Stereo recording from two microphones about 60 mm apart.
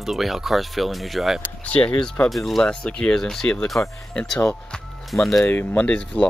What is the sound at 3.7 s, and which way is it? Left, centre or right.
Speech, left.